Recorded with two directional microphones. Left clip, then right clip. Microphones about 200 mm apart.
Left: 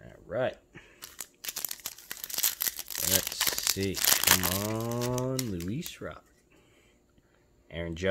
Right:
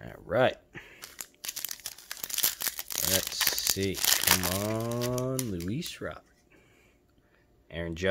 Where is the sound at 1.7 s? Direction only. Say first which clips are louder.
Even; centre (ahead or behind).